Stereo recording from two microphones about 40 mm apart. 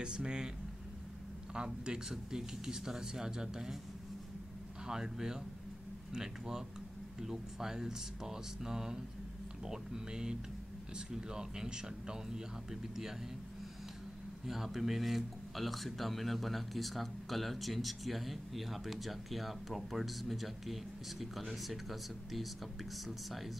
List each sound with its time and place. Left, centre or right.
0.0 s speech: right
1.5 s speech: right
4.8 s speech: centre
14.4 s speech: centre